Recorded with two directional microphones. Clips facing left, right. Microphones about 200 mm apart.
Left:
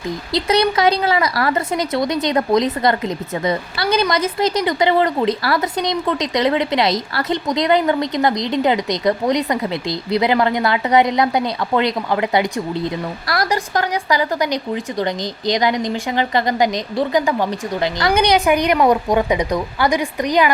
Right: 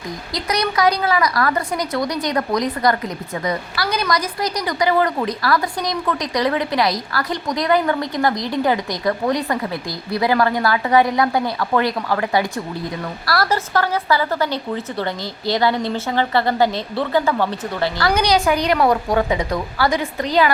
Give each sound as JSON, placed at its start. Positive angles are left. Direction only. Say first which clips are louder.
{"t": 0.3, "sound": "speech", "louder": "left 4 dB", "side_deg": 25}